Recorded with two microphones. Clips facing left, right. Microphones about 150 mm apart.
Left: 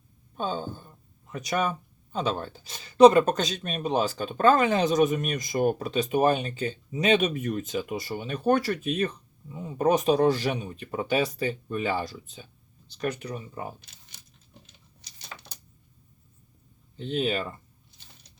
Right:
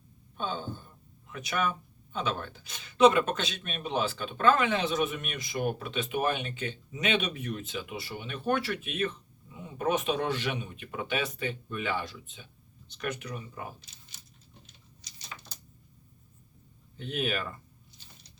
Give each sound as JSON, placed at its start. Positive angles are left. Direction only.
{"t": 0.3, "sound": "a sound", "side_deg": 40}
{"t": 1.3, "sound": "speech", "side_deg": 40}
{"t": 17.0, "sound": "speech", "side_deg": 30}